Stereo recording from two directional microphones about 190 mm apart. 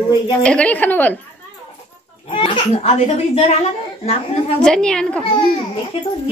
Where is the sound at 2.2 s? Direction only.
25° left (ahead or behind).